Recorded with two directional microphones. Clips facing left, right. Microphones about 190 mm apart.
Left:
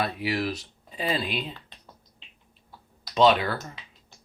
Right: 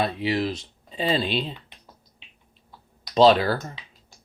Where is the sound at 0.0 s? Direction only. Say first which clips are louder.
Right 3 dB; 25° right (ahead or behind).